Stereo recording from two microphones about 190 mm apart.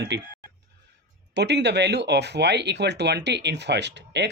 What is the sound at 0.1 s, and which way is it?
Speech, 65° right (ahead or behind).